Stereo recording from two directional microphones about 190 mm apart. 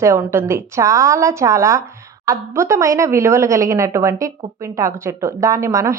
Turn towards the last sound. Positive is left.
turn(degrees=-15)  # may be behind; listen again after turning